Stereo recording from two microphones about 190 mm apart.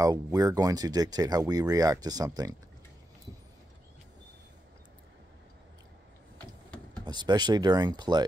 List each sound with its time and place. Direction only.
0.0 s speech: 20° right (ahead or behind)
6.3 s a sound: 5° left (ahead or behind)
7.1 s speech: 20° right (ahead or behind)